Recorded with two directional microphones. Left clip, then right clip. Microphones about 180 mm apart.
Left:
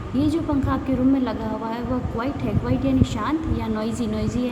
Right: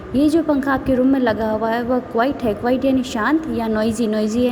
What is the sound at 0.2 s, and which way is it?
A woman's voice, 40° right (ahead or behind).